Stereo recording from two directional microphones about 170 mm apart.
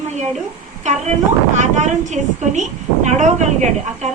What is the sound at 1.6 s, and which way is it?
A woman's voice, 45° right (ahead or behind).